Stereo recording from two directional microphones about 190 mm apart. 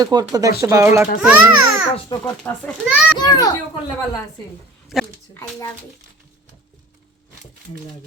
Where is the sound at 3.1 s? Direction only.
20° left (ahead or behind).